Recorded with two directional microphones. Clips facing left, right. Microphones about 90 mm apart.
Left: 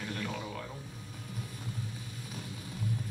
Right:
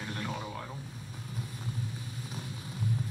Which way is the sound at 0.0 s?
20° right (ahead or behind).